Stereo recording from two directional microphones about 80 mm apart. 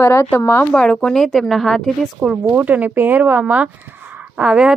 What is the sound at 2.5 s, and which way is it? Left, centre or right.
Speech, centre.